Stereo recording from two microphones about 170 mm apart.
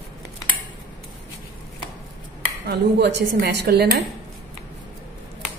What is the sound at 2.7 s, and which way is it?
A woman's voice, 85° right.